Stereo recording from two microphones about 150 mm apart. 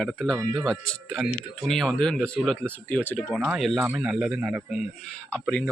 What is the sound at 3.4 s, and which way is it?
Speech, centre (ahead or behind).